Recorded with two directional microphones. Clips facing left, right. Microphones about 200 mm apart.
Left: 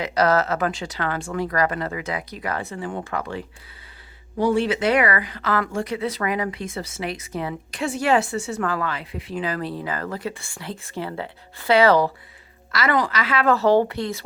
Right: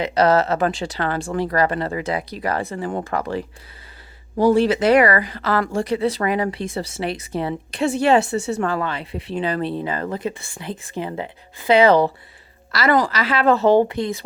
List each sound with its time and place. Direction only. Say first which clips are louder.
0.0 s speech: right 3 dB; 25° right (ahead or behind)
12.7 s speech: right 4 dB; 35° right (ahead or behind); by 14.2 s 20° right (ahead or behind)